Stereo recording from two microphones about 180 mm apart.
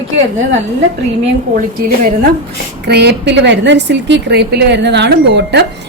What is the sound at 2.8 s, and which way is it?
A woman's voice, 65° right (ahead or behind).